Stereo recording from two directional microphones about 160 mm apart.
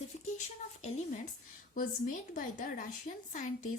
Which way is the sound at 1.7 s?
60° left (ahead or behind).